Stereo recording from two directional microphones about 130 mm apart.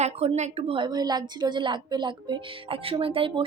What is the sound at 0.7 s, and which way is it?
Speech, 35° right (ahead or behind).